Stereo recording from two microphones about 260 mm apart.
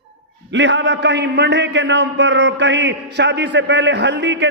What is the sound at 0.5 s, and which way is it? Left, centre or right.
A man's voice, right.